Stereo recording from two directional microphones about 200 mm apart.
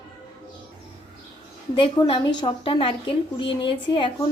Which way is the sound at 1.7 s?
25° left (ahead or behind).